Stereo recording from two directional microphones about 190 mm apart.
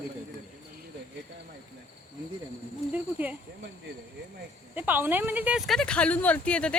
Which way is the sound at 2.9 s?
10° right (ahead or behind).